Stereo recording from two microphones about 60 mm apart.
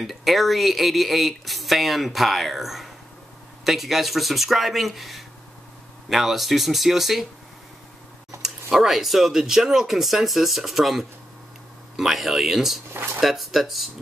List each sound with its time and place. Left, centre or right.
0.0 s speech: centre
8.4 s speech: centre
12.9 s speech: right
13.2 s speech: centre